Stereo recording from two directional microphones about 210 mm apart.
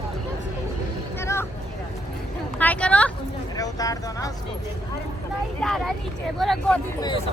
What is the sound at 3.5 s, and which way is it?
Speech, 15° left (ahead or behind).